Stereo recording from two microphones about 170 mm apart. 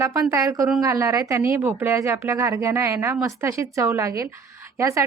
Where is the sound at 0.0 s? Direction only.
15° right (ahead or behind).